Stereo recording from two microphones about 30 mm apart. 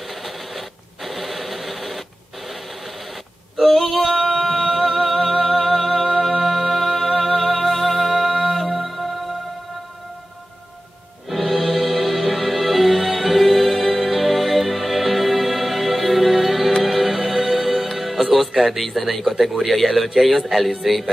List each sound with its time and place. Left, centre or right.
0.1 s a sound: centre
3.6 s singing: centre
11.2 s music: centre
18.3 s a man's voice: centre